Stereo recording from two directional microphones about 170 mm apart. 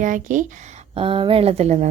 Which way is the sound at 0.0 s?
50° right (ahead or behind).